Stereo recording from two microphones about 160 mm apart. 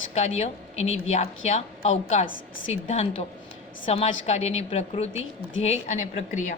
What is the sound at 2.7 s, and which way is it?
A woman's voice, 40° left (ahead or behind).